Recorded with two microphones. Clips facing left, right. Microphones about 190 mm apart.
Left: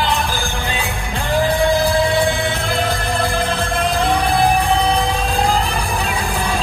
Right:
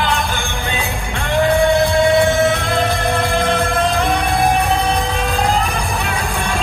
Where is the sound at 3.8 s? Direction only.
30° left (ahead or behind).